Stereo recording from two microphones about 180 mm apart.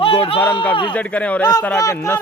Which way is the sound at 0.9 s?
5° left (ahead or behind).